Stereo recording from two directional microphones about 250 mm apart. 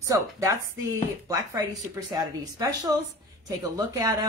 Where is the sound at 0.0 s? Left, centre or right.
Centre.